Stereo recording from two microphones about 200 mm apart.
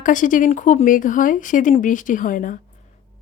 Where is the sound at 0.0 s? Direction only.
40° left (ahead or behind).